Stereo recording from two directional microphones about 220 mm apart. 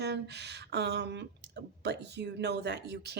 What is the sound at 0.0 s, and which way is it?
Speech, 50° right (ahead or behind).